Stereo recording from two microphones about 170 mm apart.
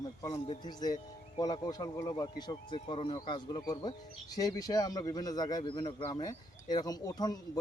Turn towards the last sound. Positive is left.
turn(degrees=25)  # may be behind; listen again after turning